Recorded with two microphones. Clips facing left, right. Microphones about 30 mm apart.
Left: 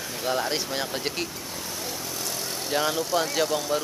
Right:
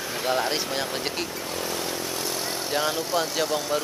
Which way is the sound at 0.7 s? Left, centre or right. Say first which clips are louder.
Right 1 dB; centre.